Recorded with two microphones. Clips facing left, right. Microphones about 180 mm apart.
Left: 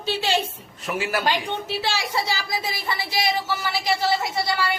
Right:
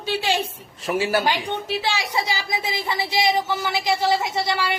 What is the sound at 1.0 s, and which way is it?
Speech, 30° right (ahead or behind).